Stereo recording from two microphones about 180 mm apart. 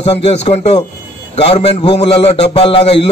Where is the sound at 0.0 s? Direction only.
35° left (ahead or behind).